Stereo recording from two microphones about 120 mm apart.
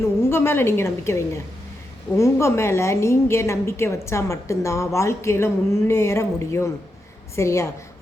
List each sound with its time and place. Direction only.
0.0 s a woman's voice: 20° left (ahead or behind)